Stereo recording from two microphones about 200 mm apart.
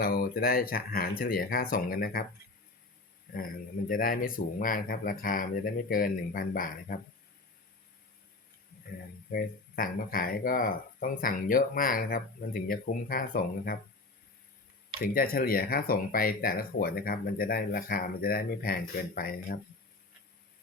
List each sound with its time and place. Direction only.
0.0 s speech: 50° left (ahead or behind)
3.3 s speech: 45° left (ahead or behind)
9.3 s speech: 45° left (ahead or behind)
15.0 s speech: 45° left (ahead or behind)